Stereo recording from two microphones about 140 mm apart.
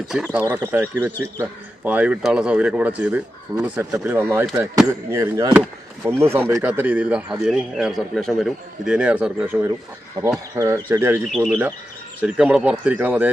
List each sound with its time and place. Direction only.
0.3 s speech: 15° right (ahead or behind)
4.5 s speech: 25° right (ahead or behind)
11.3 s speech: centre (ahead or behind)